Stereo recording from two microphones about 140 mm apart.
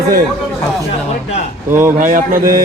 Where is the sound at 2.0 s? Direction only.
80° right.